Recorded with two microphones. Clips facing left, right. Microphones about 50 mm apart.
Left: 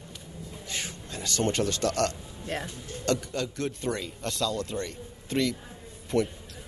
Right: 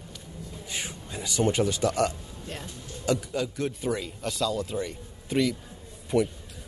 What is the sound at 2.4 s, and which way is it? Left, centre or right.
Speech, left.